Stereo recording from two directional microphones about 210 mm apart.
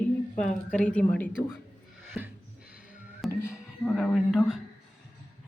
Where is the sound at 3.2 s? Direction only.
Centre (ahead or behind).